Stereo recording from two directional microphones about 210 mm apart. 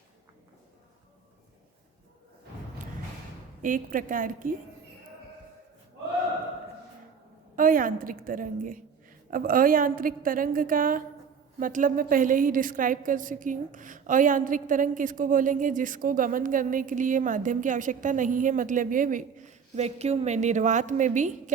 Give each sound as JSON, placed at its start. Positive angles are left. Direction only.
{"t": 3.6, "sound": "a woman's voice", "side_deg": -40}
{"t": 7.5, "sound": "a woman's voice", "side_deg": -40}